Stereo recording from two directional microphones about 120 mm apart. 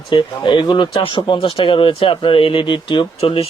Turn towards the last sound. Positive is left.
turn(degrees=50)  # may be behind; listen again after turning